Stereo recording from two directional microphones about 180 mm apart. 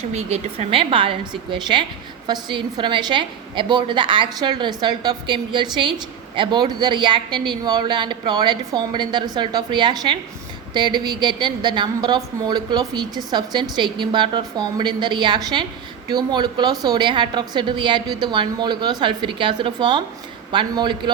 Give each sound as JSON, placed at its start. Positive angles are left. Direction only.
{"t": 0.1, "sound": "a woman's voice", "side_deg": -35}